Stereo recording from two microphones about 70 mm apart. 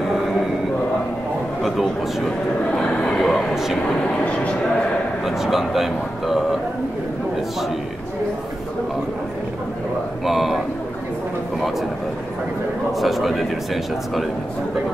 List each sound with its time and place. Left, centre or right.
1.6 s speech: centre
2.7 s speech: centre
3.5 s speech: centre
4.2 s speech: centre
5.2 s speech: centre
10.2 s a sound: centre
13.0 s speech: centre